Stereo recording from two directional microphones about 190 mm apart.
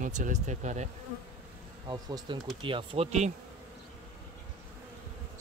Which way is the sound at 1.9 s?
25° right (ahead or behind).